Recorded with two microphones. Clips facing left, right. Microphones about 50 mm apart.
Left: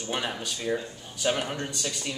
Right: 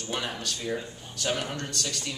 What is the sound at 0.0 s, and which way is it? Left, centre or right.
Speech, centre.